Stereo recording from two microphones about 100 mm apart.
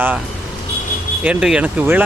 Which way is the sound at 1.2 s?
10° right (ahead or behind).